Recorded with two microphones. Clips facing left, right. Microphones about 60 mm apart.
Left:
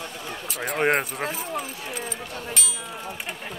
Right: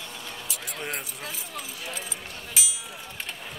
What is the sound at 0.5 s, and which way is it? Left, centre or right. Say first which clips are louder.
Speech: left 14 dB; left.